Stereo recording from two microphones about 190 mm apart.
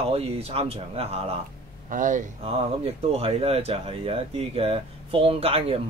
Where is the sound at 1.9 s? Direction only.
45° right (ahead or behind).